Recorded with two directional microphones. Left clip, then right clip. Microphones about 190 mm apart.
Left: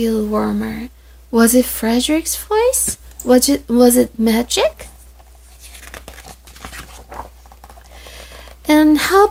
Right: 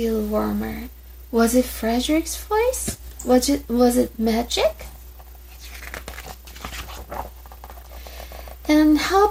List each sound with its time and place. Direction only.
0.0 s speech: 50° left (ahead or behind)
5.8 s crumpling: 15° right (ahead or behind)
8.6 s speech: 45° left (ahead or behind)